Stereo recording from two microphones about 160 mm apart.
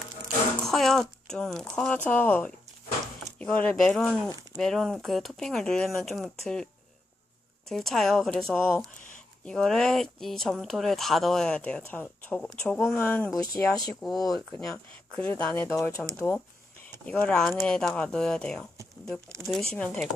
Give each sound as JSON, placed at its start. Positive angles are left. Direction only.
{"t": 0.6, "sound": "speech", "side_deg": 0}
{"t": 7.7, "sound": "speech", "side_deg": 0}
{"t": 13.3, "sound": "speech", "side_deg": 20}
{"t": 14.0, "sound": "speech", "side_deg": 0}